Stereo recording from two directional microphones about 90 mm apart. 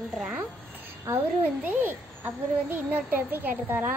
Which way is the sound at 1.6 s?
20° right (ahead or behind).